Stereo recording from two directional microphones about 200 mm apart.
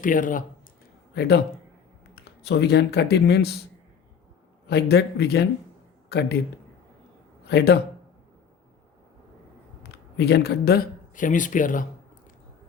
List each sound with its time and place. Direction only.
0.0 s speech: 40° left (ahead or behind)
1.1 s a man's voice: 55° left (ahead or behind)
2.5 s speech: 55° left (ahead or behind)
4.7 s speech: 55° left (ahead or behind)
7.4 s a man's voice: 55° left (ahead or behind)
10.2 s speech: 55° left (ahead or behind)